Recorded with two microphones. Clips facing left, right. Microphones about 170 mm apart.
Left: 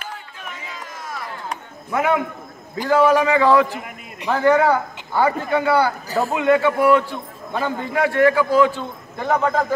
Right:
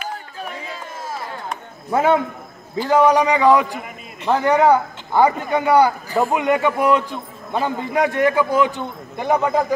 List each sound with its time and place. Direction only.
0.1 s run: 35° right (ahead or behind)
1.9 s a man's voice: 30° right (ahead or behind)
2.9 s a man's voice: 20° right (ahead or behind)